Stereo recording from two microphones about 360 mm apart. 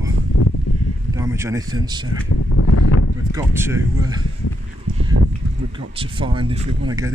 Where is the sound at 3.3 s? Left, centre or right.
Centre.